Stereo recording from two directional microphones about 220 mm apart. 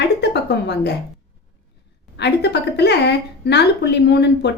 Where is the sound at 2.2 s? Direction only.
50° left (ahead or behind).